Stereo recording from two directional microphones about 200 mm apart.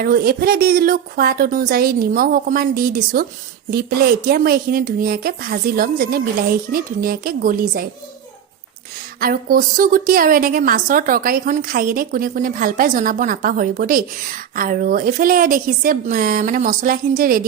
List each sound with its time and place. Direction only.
0.0 s a woman's voice: 50° right (ahead or behind)
9.2 s a woman's voice: 45° right (ahead or behind)